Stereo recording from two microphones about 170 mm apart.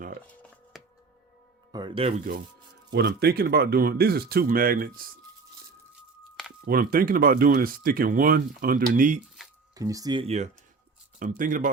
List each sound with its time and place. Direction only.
0.7 s music: centre (ahead or behind)
1.7 s speech: 30° right (ahead or behind)
2.9 s speech: 75° right (ahead or behind)
6.7 s speech: 60° right (ahead or behind)
9.7 s speech: 20° right (ahead or behind); by 10.5 s 40° right (ahead or behind)
11.2 s speech: 50° right (ahead or behind)